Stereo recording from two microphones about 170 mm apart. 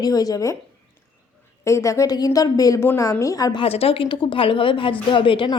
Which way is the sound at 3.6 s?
35° left (ahead or behind).